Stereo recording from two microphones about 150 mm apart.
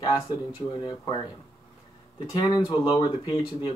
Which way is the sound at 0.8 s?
30° left (ahead or behind).